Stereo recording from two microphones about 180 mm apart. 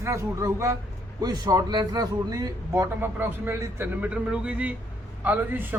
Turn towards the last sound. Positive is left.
turn(degrees=-10)  # may be behind; listen again after turning